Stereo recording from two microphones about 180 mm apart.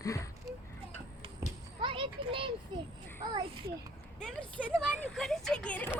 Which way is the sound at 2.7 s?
25° right (ahead or behind).